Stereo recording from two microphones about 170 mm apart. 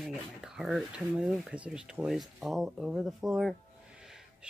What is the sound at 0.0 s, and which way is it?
Speech, centre (ahead or behind).